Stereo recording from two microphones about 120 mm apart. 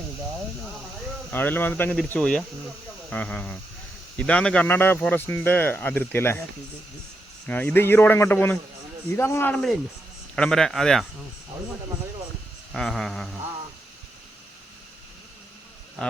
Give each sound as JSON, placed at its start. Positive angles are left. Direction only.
{"t": 1.3, "sound": "speech", "side_deg": 15}
{"t": 7.4, "sound": "speech", "side_deg": 15}
{"t": 10.3, "sound": "a man's voice", "side_deg": 5}
{"t": 12.7, "sound": "a man's voice", "side_deg": 5}
{"t": 16.0, "sound": "speech", "side_deg": 10}